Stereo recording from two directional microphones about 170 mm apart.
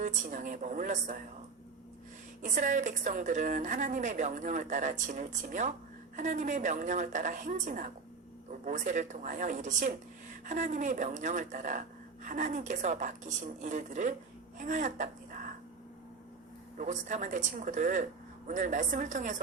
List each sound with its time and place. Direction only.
0.0 s speech: 45° right (ahead or behind)
2.4 s speech: 50° right (ahead or behind)
16.7 s speech: 45° right (ahead or behind)